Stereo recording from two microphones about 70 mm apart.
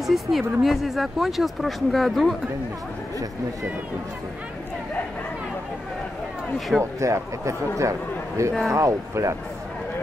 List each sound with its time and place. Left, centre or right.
0.0 s speech: centre
6.8 s speech: right